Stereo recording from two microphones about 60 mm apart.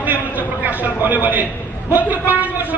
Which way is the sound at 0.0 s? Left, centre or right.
Right.